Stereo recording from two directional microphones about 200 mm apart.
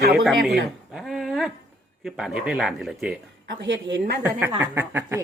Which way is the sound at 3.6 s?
70° right (ahead or behind).